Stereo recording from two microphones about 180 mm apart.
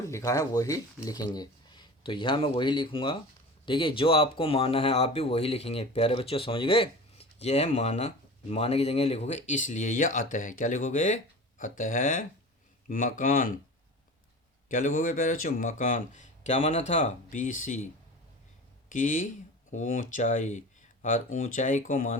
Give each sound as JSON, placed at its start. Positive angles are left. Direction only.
{"t": 0.1, "sound": "speech", "side_deg": 20}
{"t": 14.7, "sound": "speech", "side_deg": 50}
{"t": 18.9, "sound": "speech", "side_deg": 45}